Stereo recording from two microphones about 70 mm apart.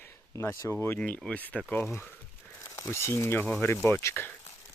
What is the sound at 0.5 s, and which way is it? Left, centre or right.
Speech, left.